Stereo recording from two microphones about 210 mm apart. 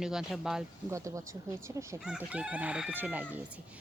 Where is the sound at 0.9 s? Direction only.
15° right (ahead or behind).